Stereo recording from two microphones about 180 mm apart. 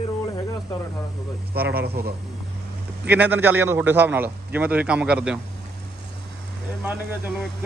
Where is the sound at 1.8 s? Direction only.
60° right (ahead or behind).